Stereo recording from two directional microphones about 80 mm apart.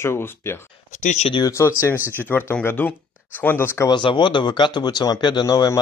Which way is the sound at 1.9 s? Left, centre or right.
Right.